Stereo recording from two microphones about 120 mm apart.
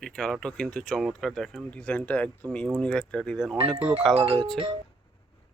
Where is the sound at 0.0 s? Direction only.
5° left (ahead or behind).